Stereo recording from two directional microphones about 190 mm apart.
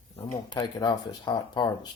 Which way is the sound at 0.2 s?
25° left (ahead or behind).